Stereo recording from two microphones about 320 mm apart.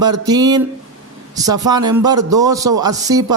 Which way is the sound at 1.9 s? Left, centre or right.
Centre.